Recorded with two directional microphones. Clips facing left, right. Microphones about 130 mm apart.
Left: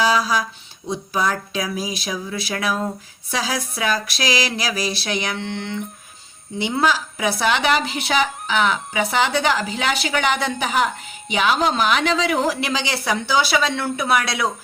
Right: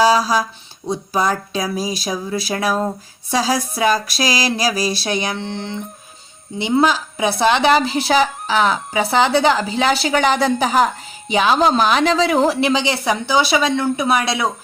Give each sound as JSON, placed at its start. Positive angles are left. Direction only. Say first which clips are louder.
{"t": 0.0, "sound": "a woman's voice", "louder": "right 4 dB", "side_deg": -35}